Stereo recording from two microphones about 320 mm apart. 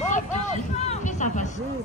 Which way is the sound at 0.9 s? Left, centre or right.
Left.